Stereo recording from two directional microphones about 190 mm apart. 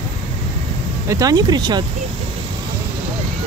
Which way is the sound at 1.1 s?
20° right (ahead or behind).